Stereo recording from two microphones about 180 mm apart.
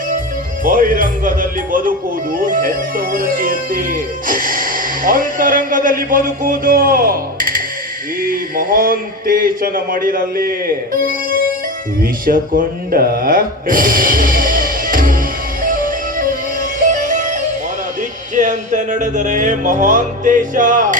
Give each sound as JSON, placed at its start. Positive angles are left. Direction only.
{"t": 0.6, "sound": "speech", "side_deg": -50}
{"t": 12.2, "sound": "music", "side_deg": -50}
{"t": 18.3, "sound": "speech", "side_deg": -45}